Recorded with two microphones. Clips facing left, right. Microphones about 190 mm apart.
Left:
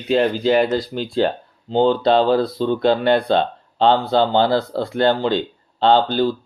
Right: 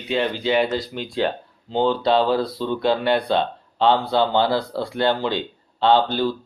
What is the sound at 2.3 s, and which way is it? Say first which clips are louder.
Speech: left 4 dB; 25° left (ahead or behind).